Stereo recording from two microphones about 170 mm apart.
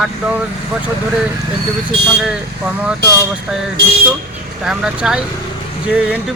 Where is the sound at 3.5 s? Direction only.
5° right (ahead or behind).